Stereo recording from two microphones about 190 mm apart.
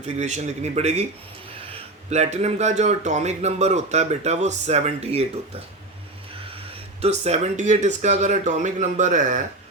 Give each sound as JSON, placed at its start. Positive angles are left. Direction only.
{"t": 0.2, "sound": "a man's voice", "side_deg": -40}
{"t": 2.0, "sound": "a man's voice", "side_deg": -35}
{"t": 7.0, "sound": "a man's voice", "side_deg": -35}